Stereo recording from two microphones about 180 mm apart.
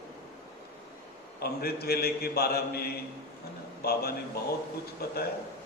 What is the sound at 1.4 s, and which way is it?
A man's voice, 60° left (ahead or behind).